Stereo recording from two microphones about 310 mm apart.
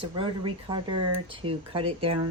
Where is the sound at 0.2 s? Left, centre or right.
Centre.